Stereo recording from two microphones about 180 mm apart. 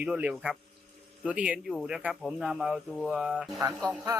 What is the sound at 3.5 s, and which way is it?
Speech, 20° right (ahead or behind).